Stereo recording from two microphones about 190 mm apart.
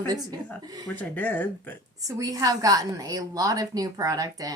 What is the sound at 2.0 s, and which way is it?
Speech, 20° right (ahead or behind).